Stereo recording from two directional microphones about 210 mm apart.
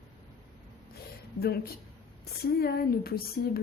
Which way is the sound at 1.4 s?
50° left (ahead or behind).